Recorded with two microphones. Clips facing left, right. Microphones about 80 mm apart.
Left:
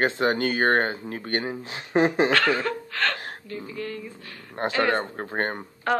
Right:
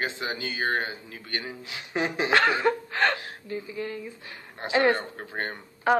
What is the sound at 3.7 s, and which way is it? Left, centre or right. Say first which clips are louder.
A woman's voice: even; centre.